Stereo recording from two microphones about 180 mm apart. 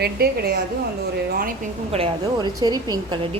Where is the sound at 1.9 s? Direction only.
30° right (ahead or behind).